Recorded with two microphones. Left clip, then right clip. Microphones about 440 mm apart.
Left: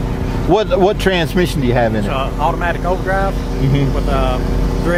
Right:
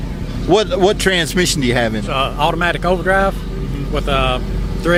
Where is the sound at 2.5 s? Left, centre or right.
Right.